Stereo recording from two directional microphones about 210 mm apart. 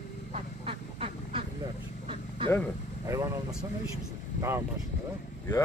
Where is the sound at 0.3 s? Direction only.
25° right (ahead or behind).